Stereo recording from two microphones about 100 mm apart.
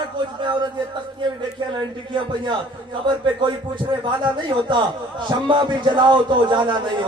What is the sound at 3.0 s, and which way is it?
A man's voice, 50° right (ahead or behind).